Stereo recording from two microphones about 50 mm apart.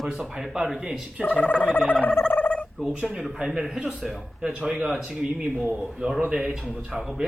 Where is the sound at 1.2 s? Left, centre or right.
Left.